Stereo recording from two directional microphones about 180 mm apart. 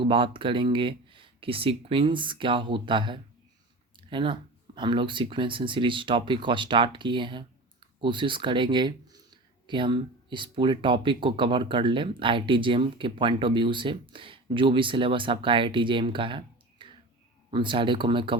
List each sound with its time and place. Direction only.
0.0 s speech: 30° right (ahead or behind)